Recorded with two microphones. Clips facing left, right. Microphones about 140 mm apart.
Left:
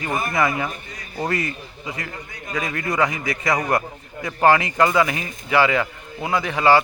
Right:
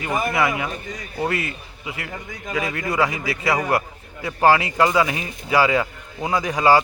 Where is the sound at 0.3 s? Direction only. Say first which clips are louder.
Left 3 dB; 10° right (ahead or behind).